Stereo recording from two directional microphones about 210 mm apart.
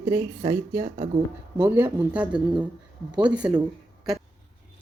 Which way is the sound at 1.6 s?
10° right (ahead or behind).